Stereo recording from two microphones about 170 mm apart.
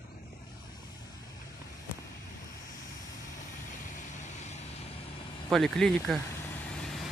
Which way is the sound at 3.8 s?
45° left (ahead or behind).